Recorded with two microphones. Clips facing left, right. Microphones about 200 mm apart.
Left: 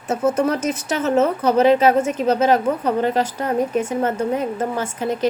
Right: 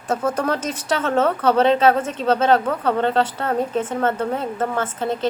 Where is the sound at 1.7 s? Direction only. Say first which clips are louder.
Left 2 dB; 10° left (ahead or behind).